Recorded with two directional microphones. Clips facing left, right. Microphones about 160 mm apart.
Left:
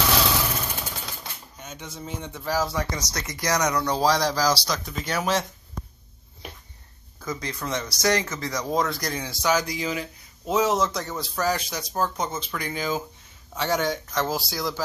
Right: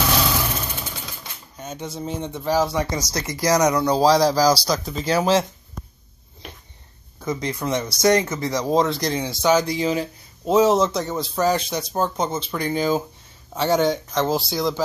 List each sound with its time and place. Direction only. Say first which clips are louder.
1.6 s speech: right 8 dB; 35° right (ahead or behind)
7.2 s speech: right 6 dB; 25° right (ahead or behind)